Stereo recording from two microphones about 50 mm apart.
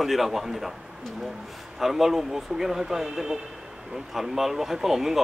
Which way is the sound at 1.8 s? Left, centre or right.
Centre.